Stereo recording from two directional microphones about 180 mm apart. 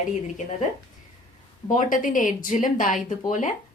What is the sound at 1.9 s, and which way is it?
A woman's voice, 45° left (ahead or behind).